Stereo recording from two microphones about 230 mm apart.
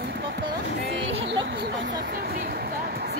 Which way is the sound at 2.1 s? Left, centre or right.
Right.